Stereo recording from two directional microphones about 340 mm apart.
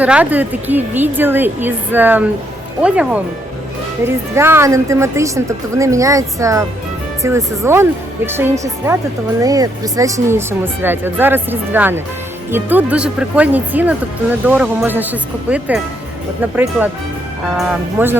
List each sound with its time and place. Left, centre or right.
0.0 s a woman's voice: centre
9.4 s a woman's voice: centre
17.6 s speech: centre